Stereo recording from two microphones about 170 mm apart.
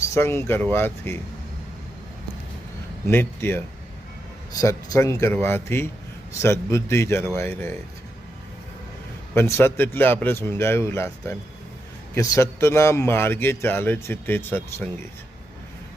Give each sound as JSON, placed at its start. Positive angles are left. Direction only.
{"t": 0.1, "sound": "speech", "side_deg": 15}
{"t": 3.1, "sound": "speech", "side_deg": 15}
{"t": 4.6, "sound": "speech", "side_deg": 15}
{"t": 9.3, "sound": "speech", "side_deg": 15}